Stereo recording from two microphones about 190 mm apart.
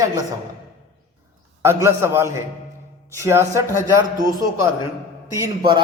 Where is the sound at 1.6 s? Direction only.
15° right (ahead or behind).